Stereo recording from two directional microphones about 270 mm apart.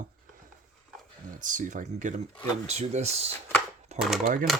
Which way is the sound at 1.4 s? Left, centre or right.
Right.